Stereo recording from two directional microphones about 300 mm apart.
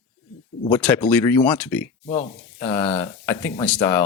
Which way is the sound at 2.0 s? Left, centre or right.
Left.